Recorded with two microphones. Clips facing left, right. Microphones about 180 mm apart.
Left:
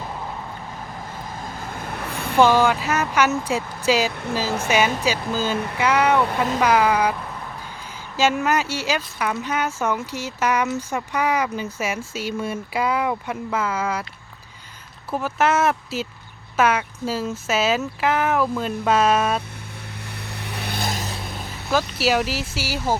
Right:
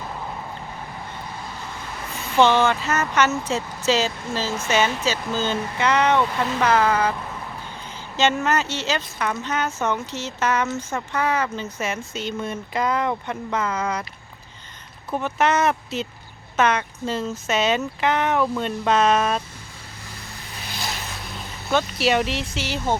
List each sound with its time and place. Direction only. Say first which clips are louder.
1.4 s vehicle: left 3 dB; 50° left (ahead or behind)
2.4 s speech: left 1 dB; 10° left (ahead or behind)
4.1 s speech: left 3 dB; 60° left (ahead or behind)
4.7 s speech: left 1 dB; 10° left (ahead or behind)
15.1 s speech: even; 5° left (ahead or behind)
20.1 s vehicle: left 6 dB; 65° left (ahead or behind); by 21.2 s 45° left (ahead or behind)
21.7 s speech: even; 5° left (ahead or behind)